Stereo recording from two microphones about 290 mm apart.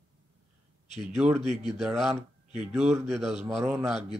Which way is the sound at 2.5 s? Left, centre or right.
Centre.